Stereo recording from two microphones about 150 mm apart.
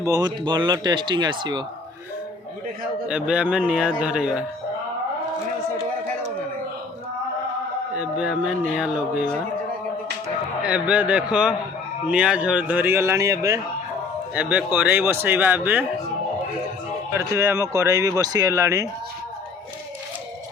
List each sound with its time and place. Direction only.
0.0 s speech: 25° right (ahead or behind)
3.1 s speech: 5° right (ahead or behind)
7.9 s speech: 5° right (ahead or behind)
10.6 s speech: 5° right (ahead or behind)
14.3 s speech: 10° right (ahead or behind)
17.2 s speech: 20° right (ahead or behind)